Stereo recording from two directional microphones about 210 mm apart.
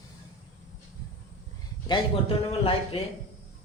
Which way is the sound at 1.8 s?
25° left (ahead or behind).